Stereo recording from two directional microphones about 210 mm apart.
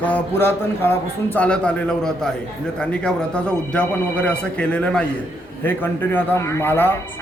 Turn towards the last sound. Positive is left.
turn(degrees=10)  # may be behind; listen again after turning